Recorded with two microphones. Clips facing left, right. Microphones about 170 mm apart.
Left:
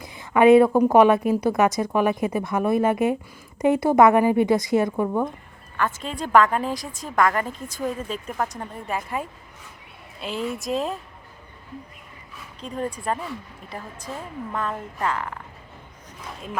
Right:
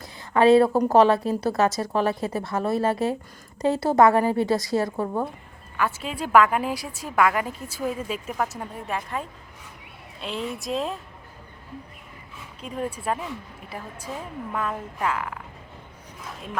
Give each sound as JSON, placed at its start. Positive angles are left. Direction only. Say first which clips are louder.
{"t": 0.0, "sound": "a sound", "louder": "left 2 dB", "side_deg": 20}
{"t": 0.9, "sound": "a woman's voice", "louder": "left 1 dB", "side_deg": 15}
{"t": 4.9, "sound": "a woman's voice", "louder": "left 3 dB", "side_deg": -5}
{"t": 9.0, "sound": "a woman's voice", "louder": "left 2 dB", "side_deg": 10}
{"t": 12.6, "sound": "a woman's voice", "louder": "left 1 dB", "side_deg": -5}